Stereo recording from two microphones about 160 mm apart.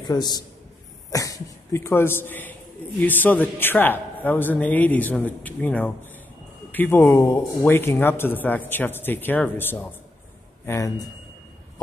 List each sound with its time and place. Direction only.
0.0 s a man's voice: 25° left (ahead or behind)